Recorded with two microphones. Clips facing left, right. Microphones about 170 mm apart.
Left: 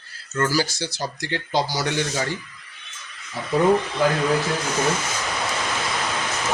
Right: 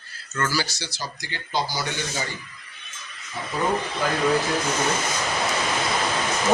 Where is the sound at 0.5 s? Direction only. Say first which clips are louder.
Left 5 dB; 50° left (ahead or behind); by 2.2 s 85° left.